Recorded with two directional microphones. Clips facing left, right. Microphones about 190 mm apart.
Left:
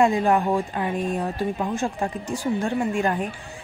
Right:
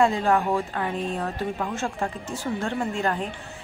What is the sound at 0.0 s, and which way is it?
A woman's voice, 15° left (ahead or behind).